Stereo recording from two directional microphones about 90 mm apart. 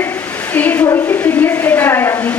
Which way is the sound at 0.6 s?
15° left (ahead or behind).